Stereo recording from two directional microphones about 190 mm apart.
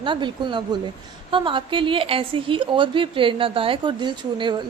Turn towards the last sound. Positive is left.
turn(degrees=-25)  # may be behind; listen again after turning